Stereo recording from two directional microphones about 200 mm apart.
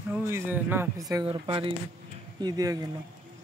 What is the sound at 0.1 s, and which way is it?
Speech, 10° right (ahead or behind).